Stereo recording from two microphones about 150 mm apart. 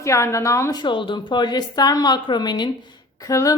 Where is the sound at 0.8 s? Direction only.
35° left (ahead or behind).